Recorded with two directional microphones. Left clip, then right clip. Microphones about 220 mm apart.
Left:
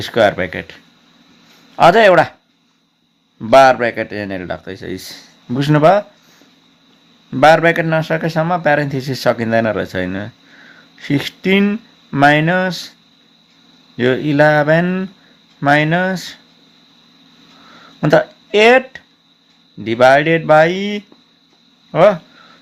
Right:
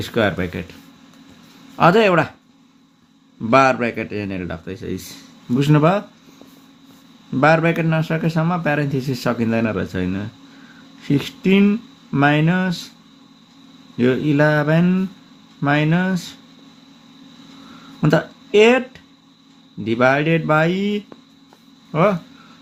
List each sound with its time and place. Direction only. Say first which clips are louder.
0.0 s a man's voice: left 6 dB; 20° left (ahead or behind)
3.5 s a man's voice: left 6 dB; 20° left (ahead or behind)
7.3 s a man's voice: left 6 dB; 25° left (ahead or behind)
13.9 s a man's voice: left 3 dB; 25° left (ahead or behind)
18.0 s a man's voice: left 6 dB; 20° left (ahead or behind)